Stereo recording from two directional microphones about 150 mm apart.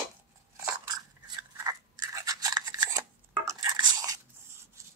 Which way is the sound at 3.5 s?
25° right (ahead or behind).